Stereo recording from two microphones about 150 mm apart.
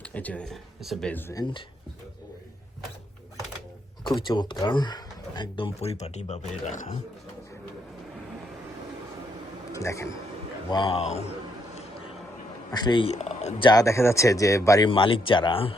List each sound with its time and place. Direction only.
0.0 s speech: 10° left (ahead or behind)
1.1 s speech: 25° left (ahead or behind)
4.0 s speech: 30° left (ahead or behind); by 7.0 s 50° left (ahead or behind)
9.7 s speech: 20° left (ahead or behind)
10.7 s a man's voice: 30° left (ahead or behind)
12.7 s speech: 30° left (ahead or behind)
13.1 s speech: 45° left (ahead or behind)
13.6 s speech: 25° left (ahead or behind)
14.8 s speech: 35° left (ahead or behind)